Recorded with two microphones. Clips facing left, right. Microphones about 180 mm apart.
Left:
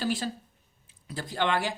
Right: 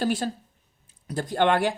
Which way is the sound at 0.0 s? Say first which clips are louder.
Right 4 dB; 50° right (ahead or behind).